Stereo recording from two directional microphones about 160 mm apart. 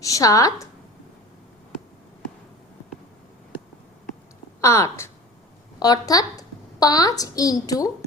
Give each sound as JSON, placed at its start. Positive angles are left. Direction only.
{"t": 0.0, "sound": "a woman's voice", "side_deg": 20}
{"t": 4.6, "sound": "a woman's voice", "side_deg": 20}